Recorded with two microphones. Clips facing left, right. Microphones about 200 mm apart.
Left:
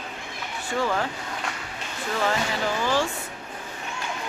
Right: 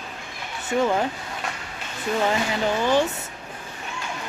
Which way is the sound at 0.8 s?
20° right (ahead or behind).